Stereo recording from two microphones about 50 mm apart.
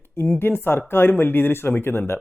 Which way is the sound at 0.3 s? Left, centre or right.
Left.